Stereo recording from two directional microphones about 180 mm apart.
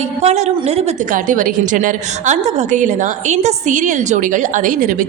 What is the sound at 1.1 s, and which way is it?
A woman's voice, 50° right (ahead or behind).